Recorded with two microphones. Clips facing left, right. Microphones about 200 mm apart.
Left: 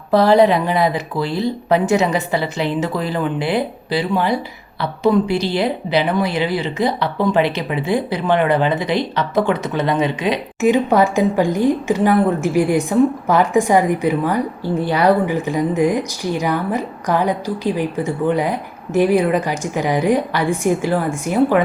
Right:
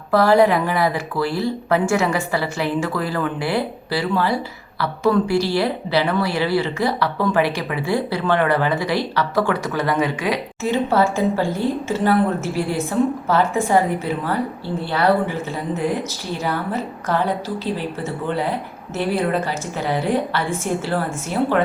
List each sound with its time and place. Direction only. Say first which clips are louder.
0.1 s a woman's voice: left 2 dB; 20° left (ahead or behind)